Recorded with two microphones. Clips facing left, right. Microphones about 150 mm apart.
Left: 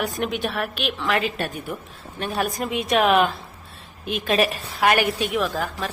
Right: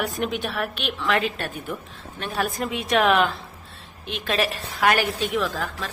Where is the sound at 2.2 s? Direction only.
15° left (ahead or behind).